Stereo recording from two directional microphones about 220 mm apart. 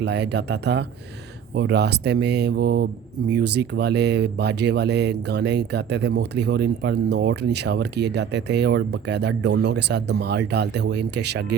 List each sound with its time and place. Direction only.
0.0 s speech: 50° right (ahead or behind)